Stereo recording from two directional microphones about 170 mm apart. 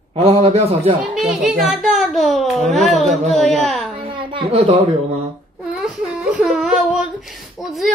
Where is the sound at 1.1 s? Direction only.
5° right (ahead or behind).